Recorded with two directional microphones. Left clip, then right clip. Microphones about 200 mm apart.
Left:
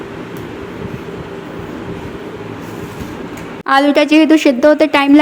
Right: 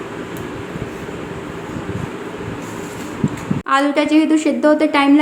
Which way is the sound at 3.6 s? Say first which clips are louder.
Left 5 dB; 35° left (ahead or behind).